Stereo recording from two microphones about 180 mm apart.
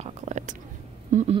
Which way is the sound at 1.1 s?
40° right (ahead or behind).